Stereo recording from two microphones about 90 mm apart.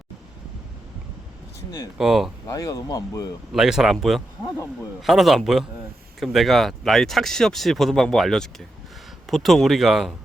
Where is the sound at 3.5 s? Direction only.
5° right (ahead or behind).